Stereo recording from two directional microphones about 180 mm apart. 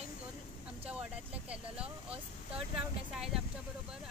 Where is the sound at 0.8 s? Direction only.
5° right (ahead or behind).